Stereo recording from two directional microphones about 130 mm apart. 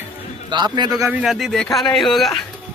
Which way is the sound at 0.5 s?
35° right (ahead or behind).